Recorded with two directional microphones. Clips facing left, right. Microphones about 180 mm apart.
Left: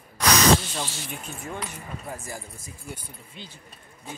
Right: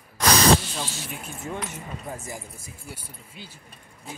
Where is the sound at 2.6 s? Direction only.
10° right (ahead or behind).